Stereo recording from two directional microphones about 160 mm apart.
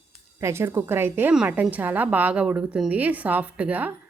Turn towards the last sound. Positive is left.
turn(degrees=-10)  # may be behind; listen again after turning